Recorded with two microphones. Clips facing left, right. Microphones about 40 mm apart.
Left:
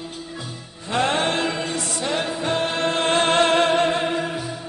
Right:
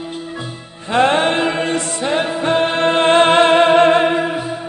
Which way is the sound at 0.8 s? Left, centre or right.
Right.